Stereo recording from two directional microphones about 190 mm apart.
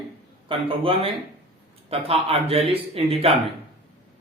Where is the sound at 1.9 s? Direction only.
30° right (ahead or behind).